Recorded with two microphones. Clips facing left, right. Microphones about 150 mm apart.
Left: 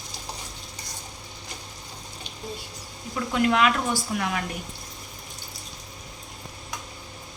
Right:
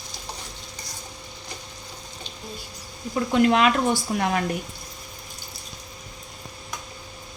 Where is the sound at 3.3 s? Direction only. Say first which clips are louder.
Right 3 dB; 25° right (ahead or behind).